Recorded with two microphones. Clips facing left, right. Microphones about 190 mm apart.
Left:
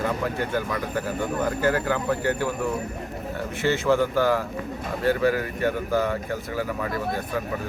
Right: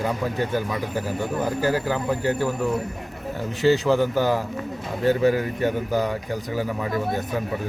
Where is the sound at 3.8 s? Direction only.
15° right (ahead or behind).